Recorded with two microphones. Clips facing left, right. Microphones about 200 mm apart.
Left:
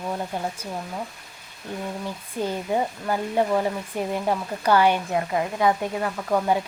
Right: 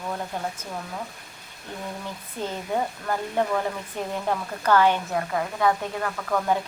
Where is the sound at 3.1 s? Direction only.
15° left (ahead or behind).